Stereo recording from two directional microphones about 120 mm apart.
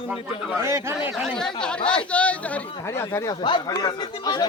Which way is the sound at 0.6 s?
25° right (ahead or behind).